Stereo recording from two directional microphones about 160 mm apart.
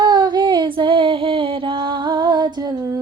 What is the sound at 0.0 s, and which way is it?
Female singing, 25° right (ahead or behind).